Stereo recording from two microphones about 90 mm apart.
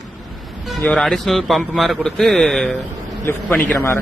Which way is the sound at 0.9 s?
5° left (ahead or behind).